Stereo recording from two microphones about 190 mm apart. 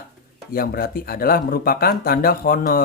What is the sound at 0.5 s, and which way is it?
Speech, 50° left (ahead or behind).